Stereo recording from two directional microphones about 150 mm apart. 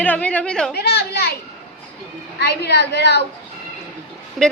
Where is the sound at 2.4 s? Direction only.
90° left.